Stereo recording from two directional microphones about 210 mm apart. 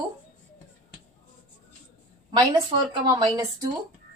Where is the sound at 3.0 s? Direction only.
20° right (ahead or behind).